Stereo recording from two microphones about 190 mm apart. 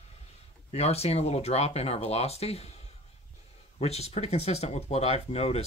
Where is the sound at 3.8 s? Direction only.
35° left (ahead or behind).